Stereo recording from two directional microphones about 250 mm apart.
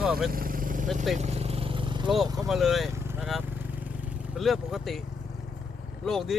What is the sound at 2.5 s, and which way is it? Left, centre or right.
Speech, centre.